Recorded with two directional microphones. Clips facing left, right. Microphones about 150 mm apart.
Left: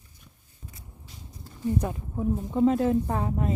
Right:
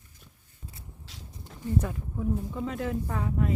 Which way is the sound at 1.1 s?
90° right.